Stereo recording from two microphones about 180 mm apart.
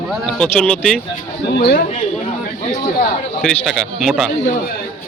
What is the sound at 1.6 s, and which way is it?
Speech, 60° left (ahead or behind).